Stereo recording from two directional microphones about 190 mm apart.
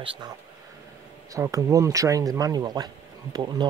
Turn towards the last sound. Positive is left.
turn(degrees=-25)  # may be behind; listen again after turning